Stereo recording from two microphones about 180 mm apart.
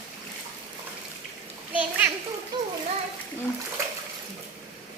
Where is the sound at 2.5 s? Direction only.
25° right (ahead or behind).